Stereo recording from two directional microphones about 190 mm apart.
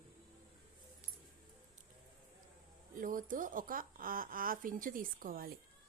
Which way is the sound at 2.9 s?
45° right (ahead or behind).